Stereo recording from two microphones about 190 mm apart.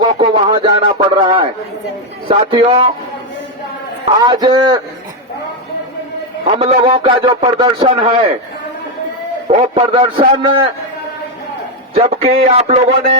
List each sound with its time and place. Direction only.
0.0 s a sound: 25° right (ahead or behind)
2.2 s a man's voice: 30° right (ahead or behind)
4.2 s a man's voice: 25° right (ahead or behind)
6.4 s a man's voice: 30° right (ahead or behind)
9.5 s a man's voice: 30° right (ahead or behind)
12.2 s speech: 35° right (ahead or behind)